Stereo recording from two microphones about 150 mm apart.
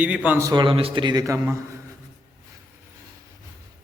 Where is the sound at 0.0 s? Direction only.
10° right (ahead or behind).